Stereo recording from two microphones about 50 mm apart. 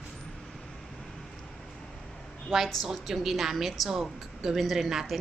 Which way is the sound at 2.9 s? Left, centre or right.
Centre.